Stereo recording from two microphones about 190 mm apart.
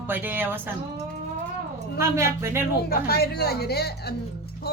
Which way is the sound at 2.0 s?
15° right (ahead or behind).